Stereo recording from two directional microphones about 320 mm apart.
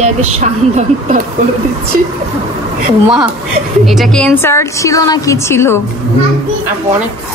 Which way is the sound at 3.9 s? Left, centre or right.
Centre.